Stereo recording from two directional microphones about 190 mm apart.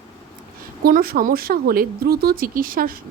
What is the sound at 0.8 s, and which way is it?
Speech, 50° right (ahead or behind).